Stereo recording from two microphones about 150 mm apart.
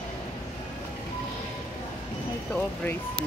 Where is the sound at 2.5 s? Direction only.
10° left (ahead or behind).